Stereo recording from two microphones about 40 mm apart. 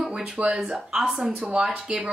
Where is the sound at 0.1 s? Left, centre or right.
Right.